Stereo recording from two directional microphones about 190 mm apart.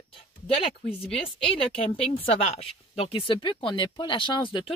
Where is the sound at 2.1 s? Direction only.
30° left (ahead or behind).